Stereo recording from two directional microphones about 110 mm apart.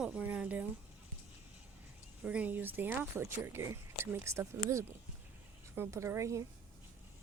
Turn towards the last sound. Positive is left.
turn(degrees=-25)  # may be behind; listen again after turning